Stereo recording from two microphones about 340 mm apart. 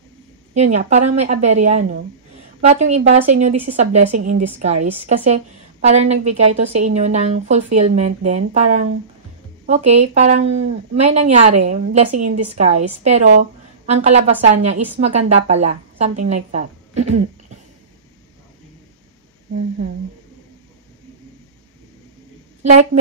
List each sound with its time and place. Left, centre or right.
0.6 s a woman's voice: centre
22.6 s a woman's voice: centre